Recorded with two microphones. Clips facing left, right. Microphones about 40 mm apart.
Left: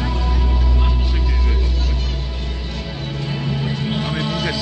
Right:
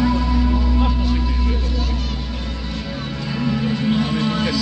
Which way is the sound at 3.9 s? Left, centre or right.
Left.